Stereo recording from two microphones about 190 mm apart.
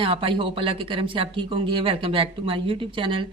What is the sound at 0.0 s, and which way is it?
Speech, 30° right (ahead or behind).